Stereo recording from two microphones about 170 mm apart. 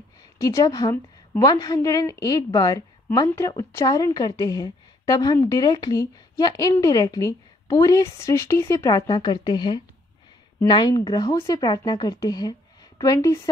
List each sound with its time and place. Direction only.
0.4 s a woman's voice: 20° left (ahead or behind)